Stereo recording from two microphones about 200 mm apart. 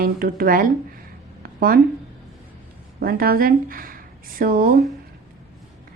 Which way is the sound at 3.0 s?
50° right (ahead or behind).